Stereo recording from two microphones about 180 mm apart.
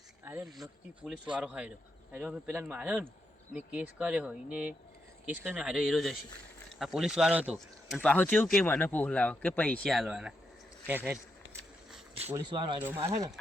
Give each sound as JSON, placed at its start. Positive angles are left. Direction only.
{"t": 1.0, "sound": "speech", "side_deg": -5}
{"t": 12.3, "sound": "speech", "side_deg": -25}